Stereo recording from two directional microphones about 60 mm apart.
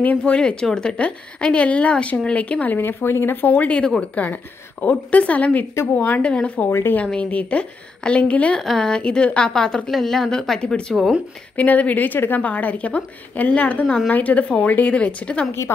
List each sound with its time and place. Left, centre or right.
0.2 s a woman's voice: centre
8.5 s a woman's voice: centre
11.5 s a woman's voice: left